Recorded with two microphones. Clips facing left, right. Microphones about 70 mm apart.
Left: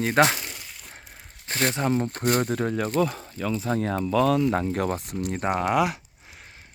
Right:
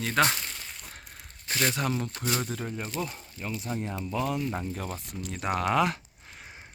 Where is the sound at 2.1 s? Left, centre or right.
Left.